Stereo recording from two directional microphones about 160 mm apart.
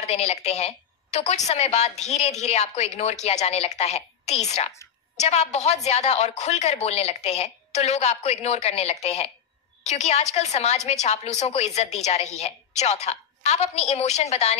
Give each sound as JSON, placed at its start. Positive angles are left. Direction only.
{"t": 0.0, "sound": "a woman's voice", "side_deg": 40}